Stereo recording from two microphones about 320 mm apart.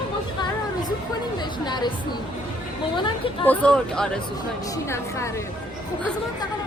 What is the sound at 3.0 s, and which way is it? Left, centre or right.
Speech, centre.